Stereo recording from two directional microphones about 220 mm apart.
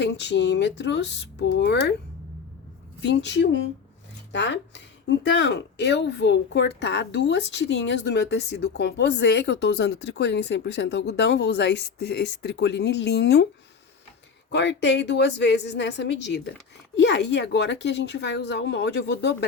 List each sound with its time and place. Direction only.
0.0 s speech: 50° left (ahead or behind)
3.0 s speech: 50° left (ahead or behind)
14.5 s speech: 50° left (ahead or behind)